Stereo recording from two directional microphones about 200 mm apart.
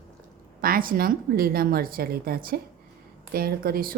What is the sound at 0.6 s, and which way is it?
A woman's voice, 45° right (ahead or behind).